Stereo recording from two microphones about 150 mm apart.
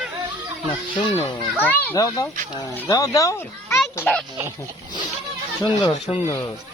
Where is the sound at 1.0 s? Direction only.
35° left (ahead or behind).